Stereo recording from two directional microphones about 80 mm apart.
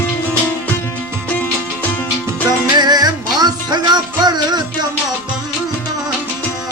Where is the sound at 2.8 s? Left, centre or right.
Right.